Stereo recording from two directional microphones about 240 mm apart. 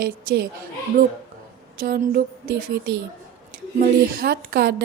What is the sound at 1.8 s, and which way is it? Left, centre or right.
Speech, right.